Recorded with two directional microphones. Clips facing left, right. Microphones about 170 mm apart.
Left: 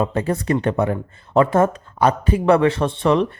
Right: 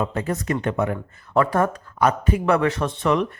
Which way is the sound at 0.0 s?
30° left (ahead or behind).